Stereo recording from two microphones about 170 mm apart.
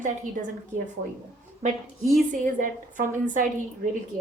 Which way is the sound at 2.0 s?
Centre (ahead or behind).